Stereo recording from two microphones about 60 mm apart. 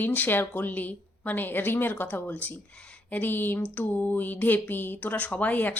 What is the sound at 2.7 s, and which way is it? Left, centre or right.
Speech, left.